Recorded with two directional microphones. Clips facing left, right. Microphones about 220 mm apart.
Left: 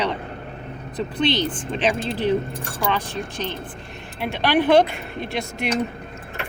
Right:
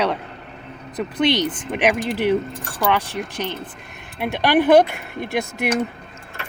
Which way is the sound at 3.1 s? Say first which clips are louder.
Right 2 dB; 20° right (ahead or behind).